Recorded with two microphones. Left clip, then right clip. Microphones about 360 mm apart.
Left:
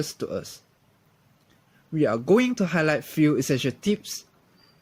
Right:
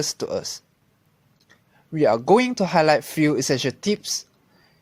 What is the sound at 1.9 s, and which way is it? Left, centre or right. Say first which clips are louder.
Speech: right 4 dB; centre.